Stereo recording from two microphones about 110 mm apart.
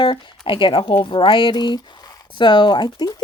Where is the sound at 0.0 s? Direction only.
50° left (ahead or behind).